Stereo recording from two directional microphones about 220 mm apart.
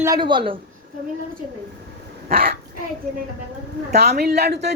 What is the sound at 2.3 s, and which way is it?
Speech, 45° right (ahead or behind).